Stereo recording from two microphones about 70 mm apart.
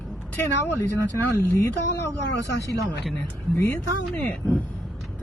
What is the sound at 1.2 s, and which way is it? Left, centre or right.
Speech, left.